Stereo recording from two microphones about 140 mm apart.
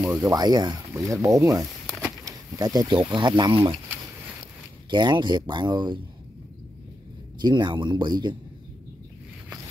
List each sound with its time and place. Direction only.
0.0 s speech: 20° right (ahead or behind); by 3.7 s 35° right (ahead or behind)
4.9 s speech: 30° right (ahead or behind)
7.4 s speech: 30° right (ahead or behind)